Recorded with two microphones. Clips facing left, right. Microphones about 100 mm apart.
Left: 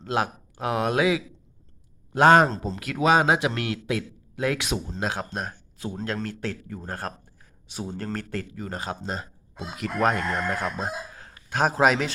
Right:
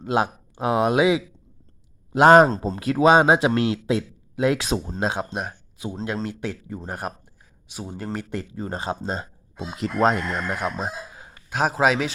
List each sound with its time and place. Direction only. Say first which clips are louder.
0.0 s a man's voice: right 4 dB; 20° right (ahead or behind)
2.6 s a man's voice: right 5 dB; 30° right (ahead or behind); by 7.1 s 15° right (ahead or behind)
7.7 s speech: even; 5° right (ahead or behind)
8.5 s a man's voice: right 4 dB; 30° right (ahead or behind); by 12.1 s centre (ahead or behind)